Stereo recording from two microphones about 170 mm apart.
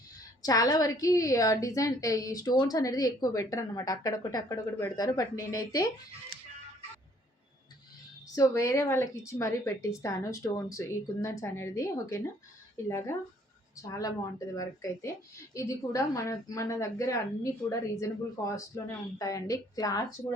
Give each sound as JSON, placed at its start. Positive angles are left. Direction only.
{"t": 0.4, "sound": "a woman's voice", "side_deg": 20}
{"t": 8.4, "sound": "a woman's voice", "side_deg": 15}